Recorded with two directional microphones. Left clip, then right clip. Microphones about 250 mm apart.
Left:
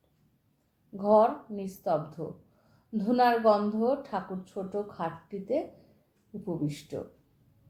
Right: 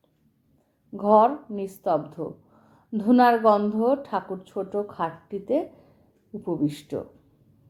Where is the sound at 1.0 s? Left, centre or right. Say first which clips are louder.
Right 5 dB; centre.